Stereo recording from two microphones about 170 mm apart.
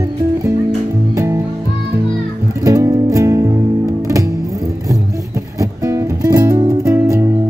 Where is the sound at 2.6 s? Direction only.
20° right (ahead or behind).